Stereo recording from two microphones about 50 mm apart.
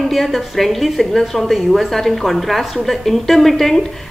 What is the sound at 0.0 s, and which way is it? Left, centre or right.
A woman's voice, centre.